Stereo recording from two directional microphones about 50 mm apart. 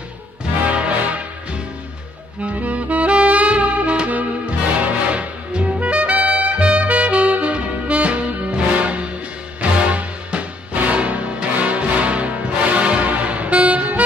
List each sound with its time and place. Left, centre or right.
0.7 s music: right
2.4 s saxophone: right
9.6 s music: right